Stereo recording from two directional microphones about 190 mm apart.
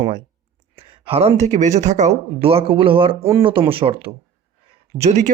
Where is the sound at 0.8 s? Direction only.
30° right (ahead or behind).